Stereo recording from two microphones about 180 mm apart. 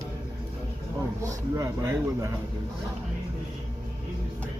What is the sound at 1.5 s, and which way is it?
Speech, 15° right (ahead or behind).